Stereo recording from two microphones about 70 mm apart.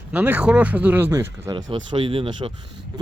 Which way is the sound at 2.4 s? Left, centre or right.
Right.